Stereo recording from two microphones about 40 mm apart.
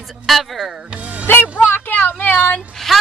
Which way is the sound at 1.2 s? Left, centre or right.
Left.